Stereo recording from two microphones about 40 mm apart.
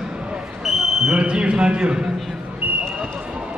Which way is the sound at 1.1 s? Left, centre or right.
Right.